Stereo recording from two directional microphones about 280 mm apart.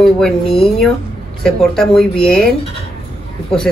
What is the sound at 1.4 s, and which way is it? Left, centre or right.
Speech, centre.